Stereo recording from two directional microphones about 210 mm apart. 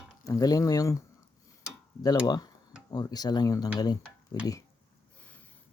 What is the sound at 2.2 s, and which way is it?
Speech, 20° left (ahead or behind).